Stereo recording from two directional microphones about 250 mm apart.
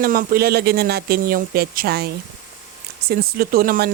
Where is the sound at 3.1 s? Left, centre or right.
Right.